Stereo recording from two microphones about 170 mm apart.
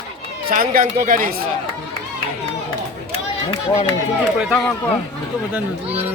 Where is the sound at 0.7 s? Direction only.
60° right (ahead or behind).